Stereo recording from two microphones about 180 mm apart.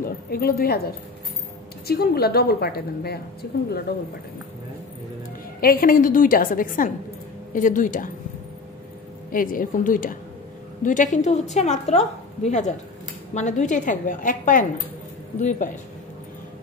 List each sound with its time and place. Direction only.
0.3 s a woman's voice: 55° left (ahead or behind)
1.9 s a woman's voice: 60° left (ahead or behind)
5.6 s a woman's voice: 55° left (ahead or behind)
9.3 s a woman's voice: 50° left (ahead or behind)